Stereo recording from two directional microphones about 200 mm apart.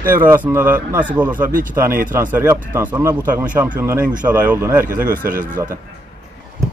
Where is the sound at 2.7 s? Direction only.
10° right (ahead or behind).